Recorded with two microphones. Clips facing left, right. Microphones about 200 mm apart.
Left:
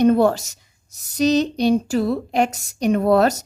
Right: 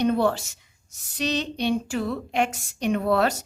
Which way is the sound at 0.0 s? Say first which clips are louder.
Left 6 dB; 45° left (ahead or behind).